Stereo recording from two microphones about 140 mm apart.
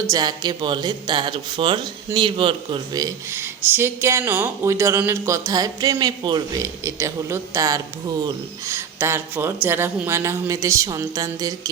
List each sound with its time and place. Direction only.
0.1 s a man's voice: 30° right (ahead or behind)